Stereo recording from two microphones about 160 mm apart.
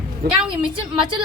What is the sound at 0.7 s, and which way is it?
Speech, 30° right (ahead or behind).